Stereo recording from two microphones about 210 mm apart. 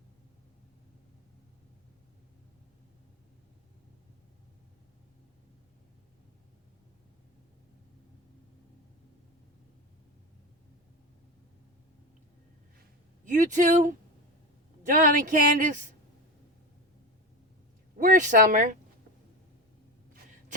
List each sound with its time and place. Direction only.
13.2 s speech: 35° right (ahead or behind)
17.9 s speech: 40° right (ahead or behind)